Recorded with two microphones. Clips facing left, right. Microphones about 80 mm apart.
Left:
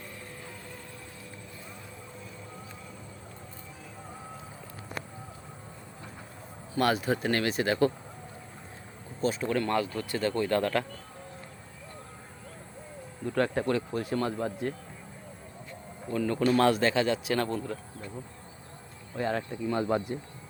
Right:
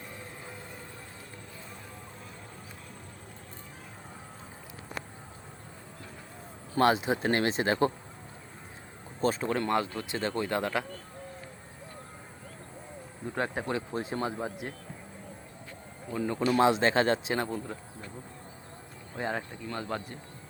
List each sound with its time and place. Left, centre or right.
6.7 s speech: right
9.2 s speech: right; by 10.8 s centre
13.2 s speech: centre
16.1 s speech: centre
16.9 s speech: right
17.3 s speech: centre
19.1 s speech: right
19.7 s speech: left